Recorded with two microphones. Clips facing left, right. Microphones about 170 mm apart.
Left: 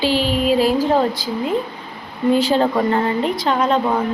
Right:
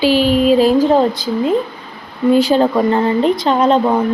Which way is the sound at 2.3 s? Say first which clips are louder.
Right 4 dB; 15° right (ahead or behind).